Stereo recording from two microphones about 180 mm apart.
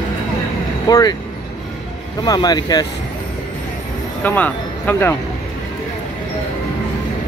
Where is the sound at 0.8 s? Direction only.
20° left (ahead or behind).